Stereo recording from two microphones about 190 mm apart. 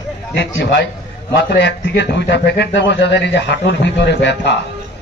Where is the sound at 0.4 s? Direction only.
70° left (ahead or behind).